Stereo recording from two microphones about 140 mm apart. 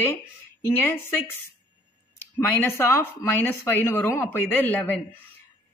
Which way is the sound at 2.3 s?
15° left (ahead or behind).